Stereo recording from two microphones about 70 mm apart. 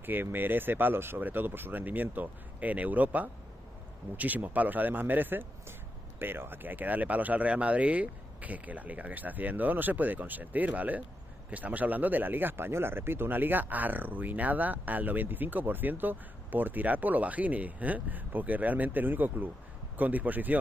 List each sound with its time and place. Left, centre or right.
0.0 s speech: right